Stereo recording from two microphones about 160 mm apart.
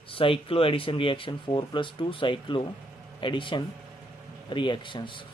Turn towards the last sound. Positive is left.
turn(degrees=30)  # may be behind; listen again after turning